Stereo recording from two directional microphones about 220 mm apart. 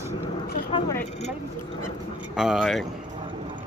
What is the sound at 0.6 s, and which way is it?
Speech, 20° left (ahead or behind).